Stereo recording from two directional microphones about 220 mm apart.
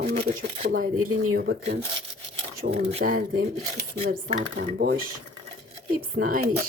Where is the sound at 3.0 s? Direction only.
40° right (ahead or behind).